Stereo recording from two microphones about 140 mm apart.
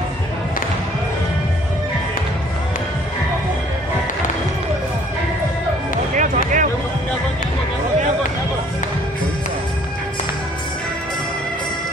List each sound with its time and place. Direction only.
6.1 s music: 65° right (ahead or behind)